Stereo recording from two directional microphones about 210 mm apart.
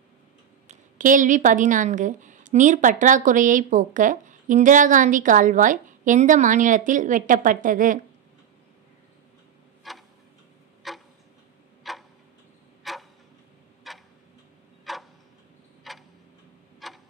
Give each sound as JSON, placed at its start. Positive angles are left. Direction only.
{"t": 0.7, "sound": "speech", "side_deg": -40}
{"t": 9.8, "sound": "tick-tock", "side_deg": 0}